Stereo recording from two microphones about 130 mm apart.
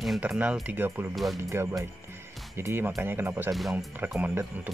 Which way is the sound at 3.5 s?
Centre (ahead or behind).